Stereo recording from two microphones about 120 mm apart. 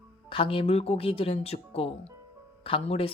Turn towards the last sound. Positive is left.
turn(degrees=50)  # may be behind; listen again after turning